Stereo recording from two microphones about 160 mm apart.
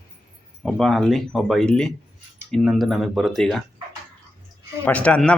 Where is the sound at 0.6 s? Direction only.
Centre (ahead or behind).